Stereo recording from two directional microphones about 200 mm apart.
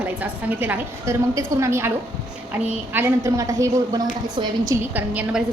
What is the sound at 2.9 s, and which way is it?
A woman's voice, 15° right (ahead or behind).